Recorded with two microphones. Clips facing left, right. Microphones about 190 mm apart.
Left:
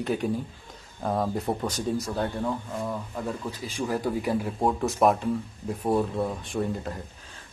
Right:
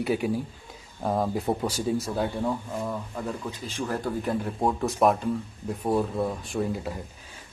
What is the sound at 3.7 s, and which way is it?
Speech, 10° left (ahead or behind).